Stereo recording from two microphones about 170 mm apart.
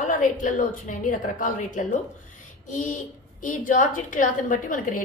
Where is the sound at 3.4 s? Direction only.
50° left (ahead or behind).